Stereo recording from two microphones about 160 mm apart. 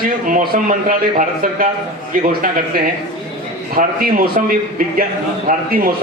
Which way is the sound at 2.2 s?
60° right (ahead or behind).